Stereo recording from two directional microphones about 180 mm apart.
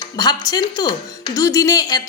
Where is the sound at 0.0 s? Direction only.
20° left (ahead or behind).